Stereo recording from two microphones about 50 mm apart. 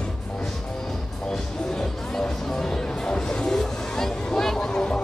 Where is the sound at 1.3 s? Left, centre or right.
Centre.